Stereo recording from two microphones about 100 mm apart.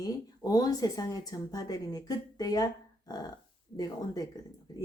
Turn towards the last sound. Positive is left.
turn(degrees=40)  # may be behind; listen again after turning